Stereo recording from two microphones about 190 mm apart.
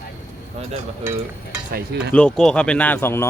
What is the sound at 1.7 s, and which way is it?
Speech, 60° right (ahead or behind).